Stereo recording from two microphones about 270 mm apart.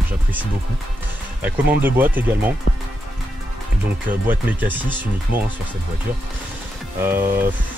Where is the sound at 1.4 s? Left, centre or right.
Centre.